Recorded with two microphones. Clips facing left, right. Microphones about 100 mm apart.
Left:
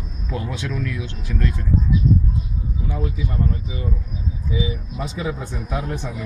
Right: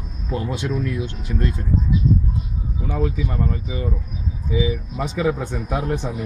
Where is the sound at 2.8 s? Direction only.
55° right (ahead or behind).